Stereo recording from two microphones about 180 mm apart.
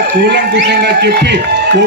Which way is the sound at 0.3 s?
65° right (ahead or behind).